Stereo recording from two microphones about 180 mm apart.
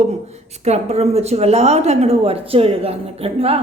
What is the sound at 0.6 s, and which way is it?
A woman's voice, 35° right (ahead or behind).